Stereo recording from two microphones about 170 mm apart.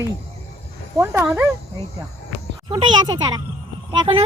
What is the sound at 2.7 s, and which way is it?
Speech, 25° right (ahead or behind).